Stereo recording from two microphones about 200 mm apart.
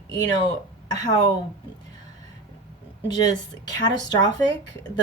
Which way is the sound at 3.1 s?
20° left (ahead or behind).